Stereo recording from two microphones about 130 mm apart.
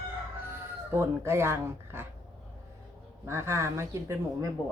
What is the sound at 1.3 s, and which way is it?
Speech, 20° right (ahead or behind).